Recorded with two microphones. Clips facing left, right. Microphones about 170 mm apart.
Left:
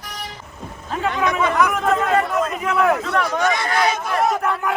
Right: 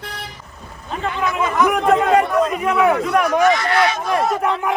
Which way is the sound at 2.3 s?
10° right (ahead or behind).